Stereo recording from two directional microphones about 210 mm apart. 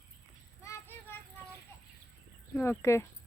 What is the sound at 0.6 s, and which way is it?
Child singing, 10° left (ahead or behind).